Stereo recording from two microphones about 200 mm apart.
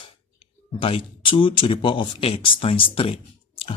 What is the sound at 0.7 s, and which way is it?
Speech, 25° left (ahead or behind).